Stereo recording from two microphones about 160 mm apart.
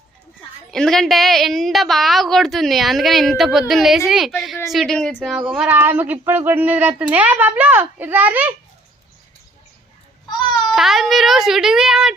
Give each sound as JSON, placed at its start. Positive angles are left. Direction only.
{"t": 0.7, "sound": "a woman's voice", "side_deg": 0}
{"t": 10.2, "sound": "babbling", "side_deg": 25}
{"t": 10.7, "sound": "a woman's voice", "side_deg": 0}